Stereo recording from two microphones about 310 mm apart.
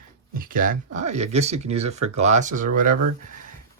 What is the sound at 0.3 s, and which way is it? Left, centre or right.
Speech, right.